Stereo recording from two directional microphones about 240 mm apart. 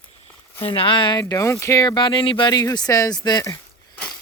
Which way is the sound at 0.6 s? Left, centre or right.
Left.